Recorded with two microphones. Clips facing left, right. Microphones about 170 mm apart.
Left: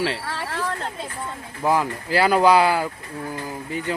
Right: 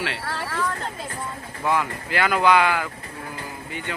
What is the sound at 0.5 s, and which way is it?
Speech, 30° left (ahead or behind).